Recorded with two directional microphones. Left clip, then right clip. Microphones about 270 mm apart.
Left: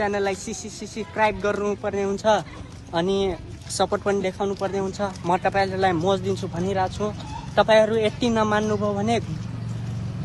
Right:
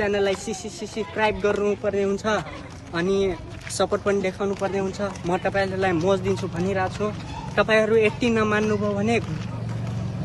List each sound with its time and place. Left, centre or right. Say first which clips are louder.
0.0 s speech: right 1 dB; centre